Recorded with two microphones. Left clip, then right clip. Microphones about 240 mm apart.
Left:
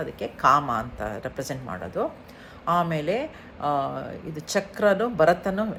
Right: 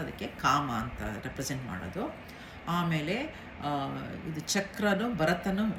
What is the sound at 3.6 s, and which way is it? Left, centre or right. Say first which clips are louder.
Speech: left 9 dB; centre.